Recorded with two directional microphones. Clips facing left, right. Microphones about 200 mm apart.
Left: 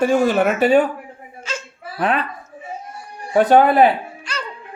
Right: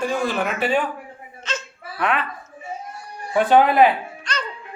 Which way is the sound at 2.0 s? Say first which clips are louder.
Left 3 dB; 35° left (ahead or behind).